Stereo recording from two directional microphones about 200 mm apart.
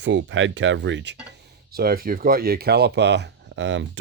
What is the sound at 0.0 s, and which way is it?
Speech, 65° right (ahead or behind).